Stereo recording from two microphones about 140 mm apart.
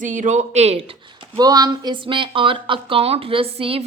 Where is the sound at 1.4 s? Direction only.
25° right (ahead or behind); by 3.9 s 45° right (ahead or behind).